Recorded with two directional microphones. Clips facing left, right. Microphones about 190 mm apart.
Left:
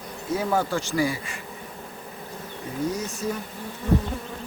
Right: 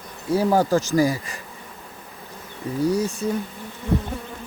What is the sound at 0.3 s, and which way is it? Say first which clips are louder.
Speech: right 6 dB; 40° right (ahead or behind).